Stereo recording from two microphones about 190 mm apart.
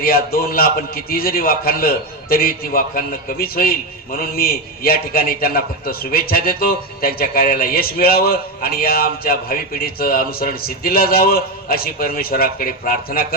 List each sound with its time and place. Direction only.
0.0 s a man's voice: 50° left (ahead or behind)